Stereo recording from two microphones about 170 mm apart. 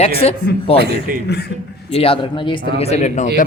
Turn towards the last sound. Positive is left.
turn(degrees=40)  # may be behind; listen again after turning